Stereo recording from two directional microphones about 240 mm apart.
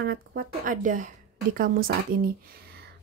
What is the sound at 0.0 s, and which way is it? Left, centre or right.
A woman's voice, right.